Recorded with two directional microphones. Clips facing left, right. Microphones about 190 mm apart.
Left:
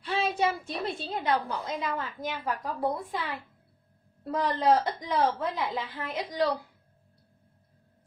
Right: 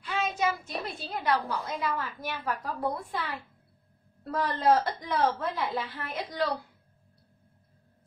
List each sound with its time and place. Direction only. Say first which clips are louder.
0.0 s a woman's voice: left 2 dB; 35° left (ahead or behind); by 6.5 s 15° left (ahead or behind)